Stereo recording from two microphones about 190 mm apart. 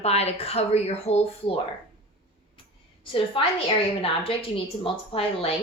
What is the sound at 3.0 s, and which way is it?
A woman's voice, 30° left (ahead or behind).